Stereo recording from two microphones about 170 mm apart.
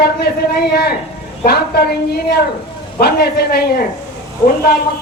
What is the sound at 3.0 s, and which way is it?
Speech, 70° left (ahead or behind).